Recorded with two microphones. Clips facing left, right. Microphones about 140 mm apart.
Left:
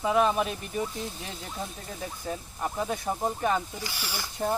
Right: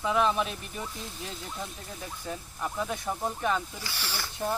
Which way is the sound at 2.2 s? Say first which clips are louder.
Left 2 dB; 30° left (ahead or behind).